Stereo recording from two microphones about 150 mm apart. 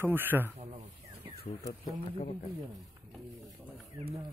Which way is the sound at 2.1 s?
40° left (ahead or behind).